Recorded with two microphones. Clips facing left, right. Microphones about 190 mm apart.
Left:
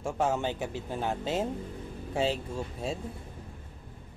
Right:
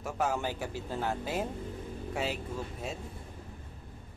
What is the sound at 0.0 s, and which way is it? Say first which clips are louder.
A man's voice: left 3 dB; 25° left (ahead or behind).